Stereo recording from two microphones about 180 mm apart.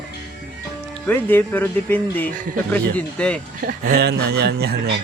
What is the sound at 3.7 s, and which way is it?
Speech, 55° right (ahead or behind).